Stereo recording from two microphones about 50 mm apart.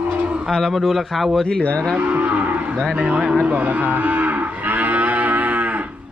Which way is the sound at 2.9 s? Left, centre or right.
Right.